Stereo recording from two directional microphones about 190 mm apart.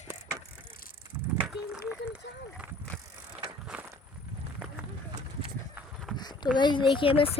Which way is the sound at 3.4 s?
5° right (ahead or behind).